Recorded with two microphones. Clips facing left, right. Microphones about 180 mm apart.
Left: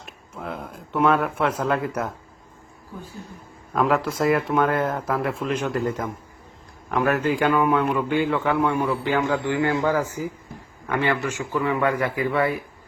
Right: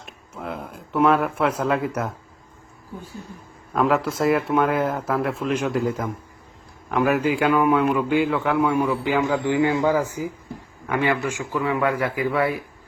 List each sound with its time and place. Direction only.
0.0 s a man's voice: centre (ahead or behind)
3.7 s a man's voice: centre (ahead or behind)
9.4 s a man's voice: 20° right (ahead or behind); by 12.5 s centre (ahead or behind)